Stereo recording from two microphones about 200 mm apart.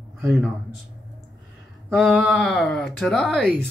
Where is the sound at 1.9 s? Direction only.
5° right (ahead or behind).